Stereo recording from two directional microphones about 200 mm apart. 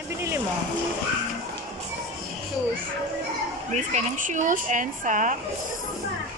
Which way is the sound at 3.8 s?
40° right (ahead or behind).